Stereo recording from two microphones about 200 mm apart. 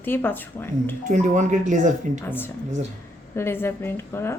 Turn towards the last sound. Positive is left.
turn(degrees=10)  # may be behind; listen again after turning